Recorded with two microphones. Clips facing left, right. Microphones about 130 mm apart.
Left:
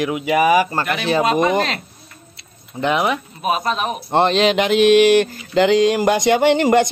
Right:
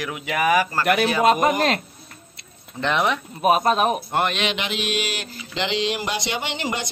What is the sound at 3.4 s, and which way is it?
Speech, 50° right (ahead or behind).